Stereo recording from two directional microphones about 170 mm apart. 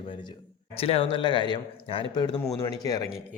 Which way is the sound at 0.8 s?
35° left (ahead or behind).